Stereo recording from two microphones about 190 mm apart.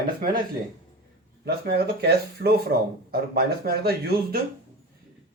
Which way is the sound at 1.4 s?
55° right (ahead or behind).